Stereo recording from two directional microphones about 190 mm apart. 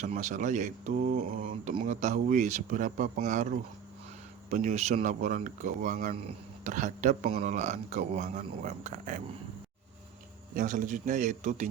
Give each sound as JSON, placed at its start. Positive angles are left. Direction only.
{"t": 0.0, "sound": "speech", "side_deg": -40}
{"t": 10.5, "sound": "speech", "side_deg": -45}